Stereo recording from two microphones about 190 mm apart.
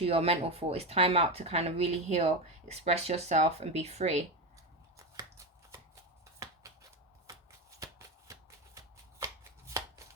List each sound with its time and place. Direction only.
0.0 s speech: 30° right (ahead or behind)
7.8 s shuffling cards: 15° right (ahead or behind)